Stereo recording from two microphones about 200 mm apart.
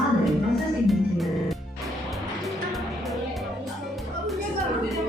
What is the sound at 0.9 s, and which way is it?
Music, centre (ahead or behind).